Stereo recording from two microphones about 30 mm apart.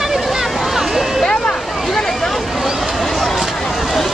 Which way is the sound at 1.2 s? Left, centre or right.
Left.